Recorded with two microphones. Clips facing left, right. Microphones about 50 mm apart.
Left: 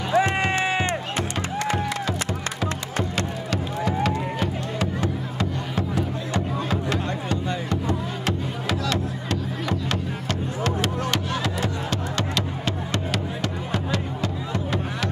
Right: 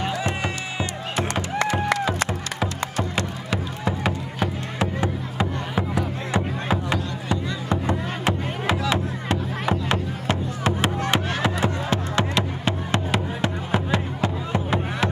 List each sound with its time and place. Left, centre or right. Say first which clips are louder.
0.1 s music: left 6 dB; left
3.2 s music: even; centre